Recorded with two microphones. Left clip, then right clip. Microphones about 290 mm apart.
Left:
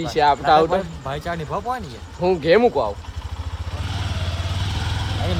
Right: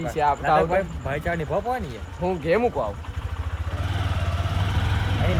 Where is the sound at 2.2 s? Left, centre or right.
Left.